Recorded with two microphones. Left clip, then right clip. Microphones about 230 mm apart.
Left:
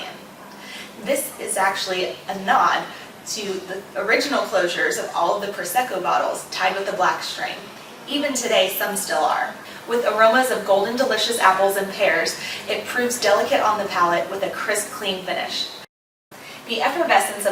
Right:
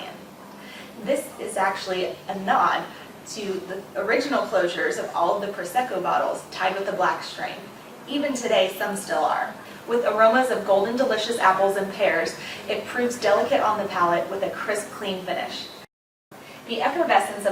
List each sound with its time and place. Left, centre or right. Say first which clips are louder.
1.0 s speech: left 2 dB; centre
3.9 s speech: left 3 dB; centre
5.1 s speech: left 1 dB; right
5.4 s speech: left 3 dB; centre
16.6 s speech: left 2 dB; centre